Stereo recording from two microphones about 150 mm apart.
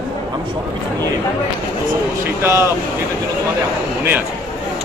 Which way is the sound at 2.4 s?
15° right (ahead or behind).